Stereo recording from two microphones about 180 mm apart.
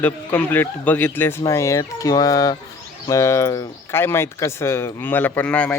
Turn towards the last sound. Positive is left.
turn(degrees=5)  # may be behind; listen again after turning